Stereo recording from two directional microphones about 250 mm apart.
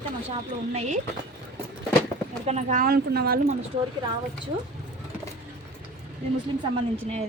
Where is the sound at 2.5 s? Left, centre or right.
Right.